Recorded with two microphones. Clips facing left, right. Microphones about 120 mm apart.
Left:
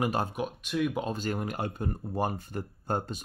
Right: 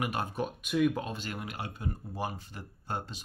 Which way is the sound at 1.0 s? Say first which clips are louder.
Left 6 dB; 40° left (ahead or behind).